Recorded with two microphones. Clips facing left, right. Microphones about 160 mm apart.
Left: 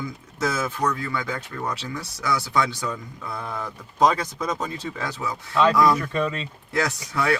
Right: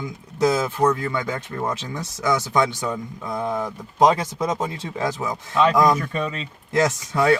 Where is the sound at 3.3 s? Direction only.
20° right (ahead or behind).